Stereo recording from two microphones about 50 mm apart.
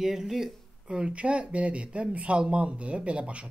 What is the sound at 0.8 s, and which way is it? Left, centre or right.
Speech, centre.